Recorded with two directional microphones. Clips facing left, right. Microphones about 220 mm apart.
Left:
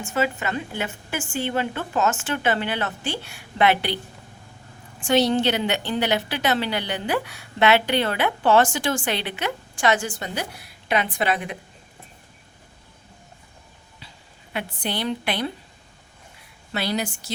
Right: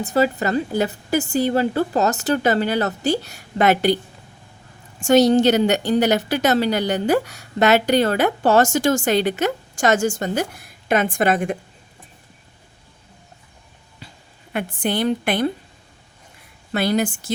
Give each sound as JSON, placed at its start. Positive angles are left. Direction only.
{"t": 0.0, "sound": "a woman's voice", "side_deg": -35}
{"t": 4.9, "sound": "a woman's voice", "side_deg": -45}
{"t": 14.5, "sound": "a woman's voice", "side_deg": -50}
{"t": 16.7, "sound": "a woman's voice", "side_deg": -50}